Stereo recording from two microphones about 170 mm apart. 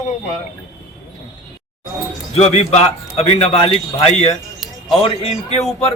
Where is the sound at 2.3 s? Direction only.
40° left (ahead or behind).